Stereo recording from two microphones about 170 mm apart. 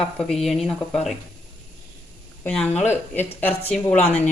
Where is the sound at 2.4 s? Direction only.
5° left (ahead or behind).